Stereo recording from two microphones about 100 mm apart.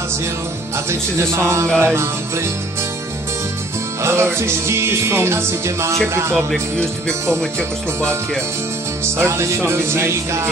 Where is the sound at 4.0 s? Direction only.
25° right (ahead or behind).